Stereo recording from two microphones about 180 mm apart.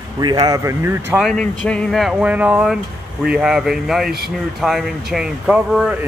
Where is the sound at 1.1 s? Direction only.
Centre (ahead or behind).